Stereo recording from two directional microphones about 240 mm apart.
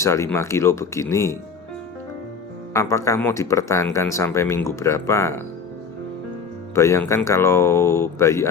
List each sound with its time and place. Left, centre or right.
0.0 s speech: centre
2.7 s speech: centre
6.7 s speech: centre